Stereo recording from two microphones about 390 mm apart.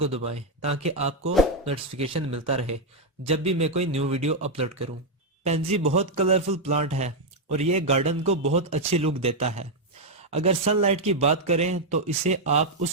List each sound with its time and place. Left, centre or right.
0.0 s a man's voice: centre